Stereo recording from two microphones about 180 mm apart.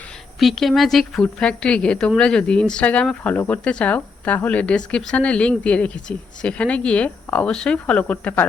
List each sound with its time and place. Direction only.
0.3 s a woman's voice: centre (ahead or behind)